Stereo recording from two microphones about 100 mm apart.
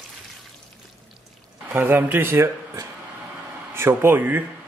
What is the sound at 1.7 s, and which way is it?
Speech, 20° right (ahead or behind).